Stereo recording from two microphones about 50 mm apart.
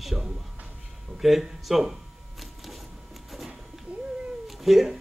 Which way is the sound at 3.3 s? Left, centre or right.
Centre.